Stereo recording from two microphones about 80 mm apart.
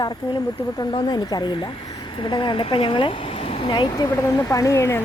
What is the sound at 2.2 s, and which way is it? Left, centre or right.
Speech, left.